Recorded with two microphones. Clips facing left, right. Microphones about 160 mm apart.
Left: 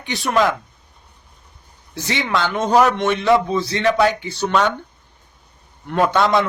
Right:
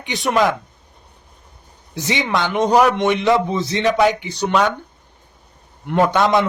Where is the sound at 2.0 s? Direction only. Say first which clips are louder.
Right 1 dB; 20° right (ahead or behind).